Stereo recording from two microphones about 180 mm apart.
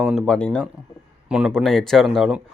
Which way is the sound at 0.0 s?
Centre (ahead or behind).